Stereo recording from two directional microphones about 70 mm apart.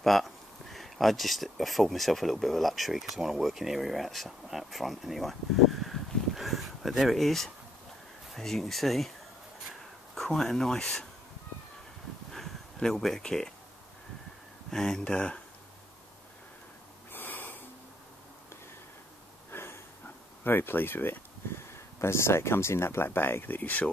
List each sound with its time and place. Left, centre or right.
0.0 s speech: centre
10.1 s speech: centre
12.3 s a sound: centre
14.7 s speech: centre
17.1 s snort: left
19.5 s a sound: left
20.4 s speech: left